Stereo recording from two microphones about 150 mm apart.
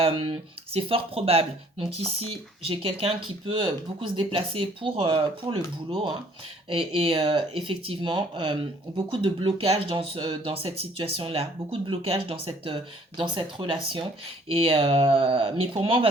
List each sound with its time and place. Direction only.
0.7 s speech: 40° right (ahead or behind)